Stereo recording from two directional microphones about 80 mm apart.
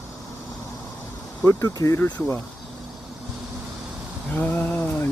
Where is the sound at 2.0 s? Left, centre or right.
Left.